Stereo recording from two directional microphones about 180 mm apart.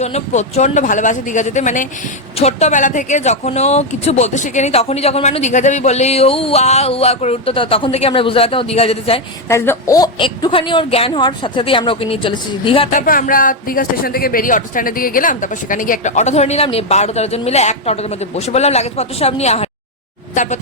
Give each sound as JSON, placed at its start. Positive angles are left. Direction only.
{"t": 0.0, "sound": "speech", "side_deg": 35}
{"t": 9.5, "sound": "a woman's voice", "side_deg": 15}
{"t": 12.9, "sound": "speech", "side_deg": 45}